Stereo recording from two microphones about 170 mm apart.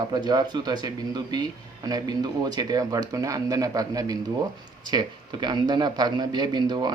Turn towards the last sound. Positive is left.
turn(degrees=-25)  # may be behind; listen again after turning